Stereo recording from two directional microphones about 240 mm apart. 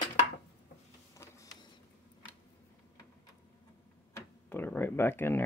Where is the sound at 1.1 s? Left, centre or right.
Centre.